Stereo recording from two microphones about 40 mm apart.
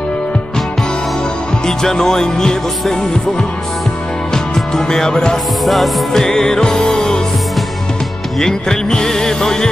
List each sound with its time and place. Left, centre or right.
1.7 s music: centre
4.6 s music: centre
5.7 s music: centre
6.2 s music: centre
8.4 s music: centre